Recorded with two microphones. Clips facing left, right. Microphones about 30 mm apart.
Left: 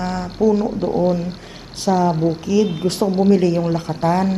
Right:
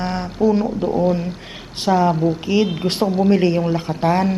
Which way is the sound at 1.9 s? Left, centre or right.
Right.